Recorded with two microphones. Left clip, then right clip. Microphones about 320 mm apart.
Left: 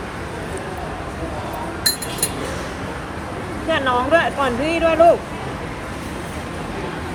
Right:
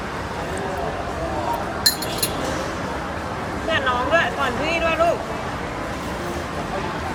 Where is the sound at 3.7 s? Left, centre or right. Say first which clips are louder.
Left 3 dB; centre.